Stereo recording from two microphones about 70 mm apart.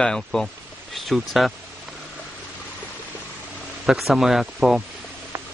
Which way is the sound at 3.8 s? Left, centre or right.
Centre.